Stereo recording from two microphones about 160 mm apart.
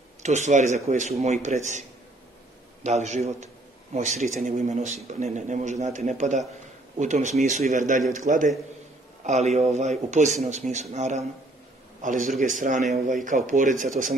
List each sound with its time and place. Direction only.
0.2 s a man's voice: 45° right (ahead or behind)